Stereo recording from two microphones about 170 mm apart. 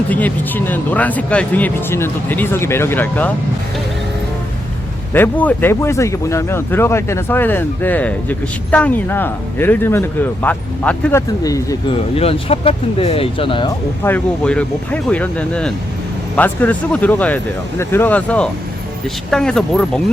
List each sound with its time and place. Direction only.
0.1 s speech: 10° left (ahead or behind)
5.1 s speech: 10° left (ahead or behind)
11.4 s speech: 20° left (ahead or behind)
11.9 s speech: 35° left (ahead or behind)
14.0 s speech: 10° left (ahead or behind)